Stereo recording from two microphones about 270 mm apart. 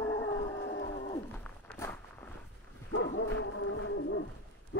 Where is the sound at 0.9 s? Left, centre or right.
Centre.